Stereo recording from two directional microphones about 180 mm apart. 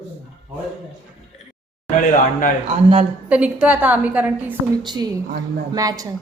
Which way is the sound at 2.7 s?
35° right (ahead or behind).